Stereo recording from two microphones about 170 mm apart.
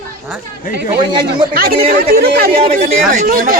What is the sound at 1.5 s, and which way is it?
Speech, 60° right (ahead or behind).